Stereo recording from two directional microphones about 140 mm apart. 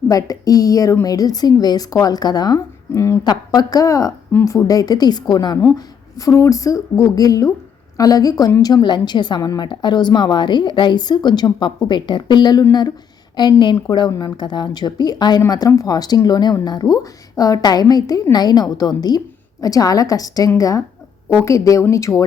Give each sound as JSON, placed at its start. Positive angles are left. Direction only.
{"t": 0.1, "sound": "a woman's voice", "side_deg": 25}